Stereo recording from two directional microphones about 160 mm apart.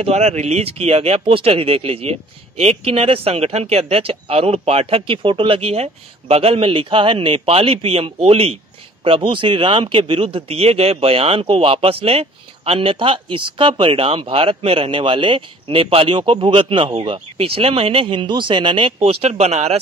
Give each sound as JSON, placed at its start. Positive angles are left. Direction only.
{"t": 0.0, "sound": "speech", "side_deg": -45}